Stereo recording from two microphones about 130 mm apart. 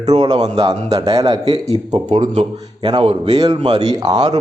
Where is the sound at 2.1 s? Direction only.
65° right (ahead or behind).